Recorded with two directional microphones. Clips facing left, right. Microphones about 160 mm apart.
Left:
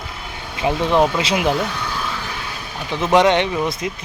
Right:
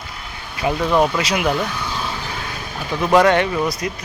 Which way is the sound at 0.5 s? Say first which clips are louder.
Even; 25° left (ahead or behind).